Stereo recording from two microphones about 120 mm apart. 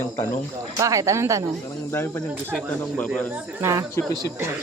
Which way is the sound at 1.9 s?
15° left (ahead or behind).